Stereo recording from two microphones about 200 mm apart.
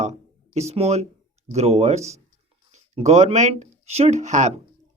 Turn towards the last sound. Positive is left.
turn(degrees=-35)  # may be behind; listen again after turning